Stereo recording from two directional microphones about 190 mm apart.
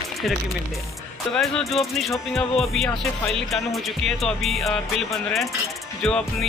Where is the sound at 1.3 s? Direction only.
Centre (ahead or behind).